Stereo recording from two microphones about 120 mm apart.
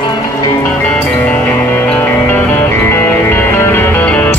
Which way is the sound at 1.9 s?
15° left (ahead or behind).